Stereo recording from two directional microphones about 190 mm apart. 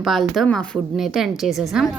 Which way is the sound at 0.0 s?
Centre (ahead or behind).